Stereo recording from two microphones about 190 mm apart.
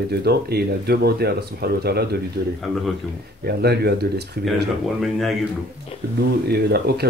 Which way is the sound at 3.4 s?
55° right (ahead or behind).